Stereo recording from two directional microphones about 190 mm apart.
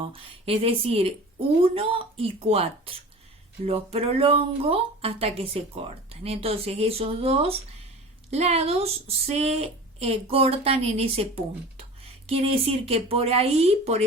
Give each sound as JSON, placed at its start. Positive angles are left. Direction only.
{"t": 0.0, "sound": "a woman's voice", "side_deg": -30}